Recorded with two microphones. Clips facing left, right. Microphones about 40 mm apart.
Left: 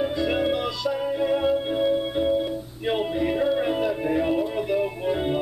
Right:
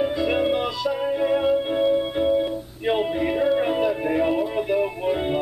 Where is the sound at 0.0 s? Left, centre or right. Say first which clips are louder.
Right 2 dB; centre.